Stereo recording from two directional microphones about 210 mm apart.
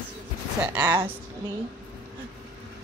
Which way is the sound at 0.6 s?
5° right (ahead or behind).